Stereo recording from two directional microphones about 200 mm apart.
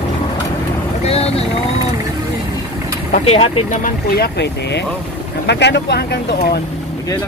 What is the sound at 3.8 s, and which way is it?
Speech, 50° left (ahead or behind).